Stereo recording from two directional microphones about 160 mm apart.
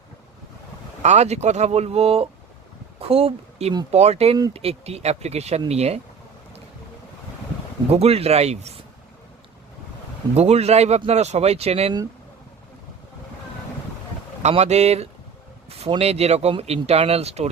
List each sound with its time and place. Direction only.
1.0 s speech: 45° right (ahead or behind)
7.9 s speech: 40° right (ahead or behind)
10.3 s speech: 40° right (ahead or behind)
14.4 s speech: 45° right (ahead or behind)